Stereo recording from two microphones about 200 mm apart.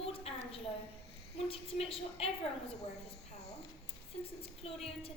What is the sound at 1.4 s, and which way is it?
A woman's voice, 30° left (ahead or behind).